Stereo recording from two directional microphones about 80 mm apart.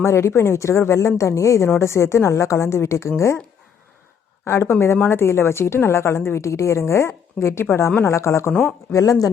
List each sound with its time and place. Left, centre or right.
0.0 s a woman's voice: left
4.4 s a woman's voice: left